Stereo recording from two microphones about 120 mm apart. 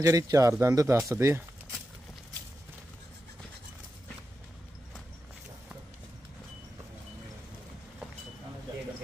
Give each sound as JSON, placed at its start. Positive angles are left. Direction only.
{"t": 0.0, "sound": "speech", "side_deg": -30}